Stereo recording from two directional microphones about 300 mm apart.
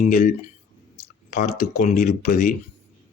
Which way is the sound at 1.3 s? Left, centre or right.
Left.